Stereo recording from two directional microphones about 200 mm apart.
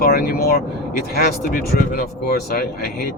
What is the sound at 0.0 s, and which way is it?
Speech, 50° left (ahead or behind).